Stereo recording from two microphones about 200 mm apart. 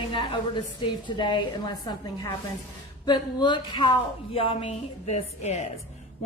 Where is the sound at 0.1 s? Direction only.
25° left (ahead or behind).